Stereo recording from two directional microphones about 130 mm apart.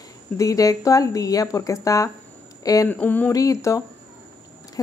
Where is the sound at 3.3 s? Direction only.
25° left (ahead or behind).